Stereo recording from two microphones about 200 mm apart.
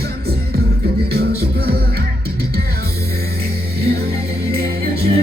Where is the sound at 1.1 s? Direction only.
50° right (ahead or behind).